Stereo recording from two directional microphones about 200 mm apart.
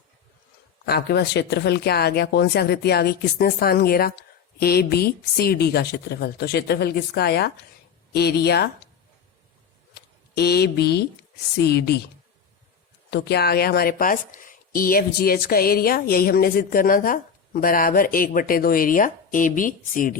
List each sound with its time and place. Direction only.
0.9 s a woman's voice: 55° left (ahead or behind)
9.9 s a sound: 50° left (ahead or behind)
11.5 s a woman's voice: 55° left (ahead or behind)
13.1 s a woman's voice: 55° left (ahead or behind)